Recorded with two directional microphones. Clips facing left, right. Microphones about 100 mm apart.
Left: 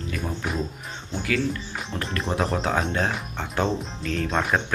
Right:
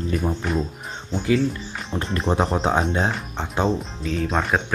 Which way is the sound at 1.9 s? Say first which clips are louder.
Right 5 dB; 25° right (ahead or behind).